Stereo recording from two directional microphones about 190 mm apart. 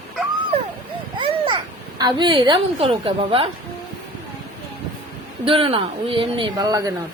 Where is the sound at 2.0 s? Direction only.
25° right (ahead or behind).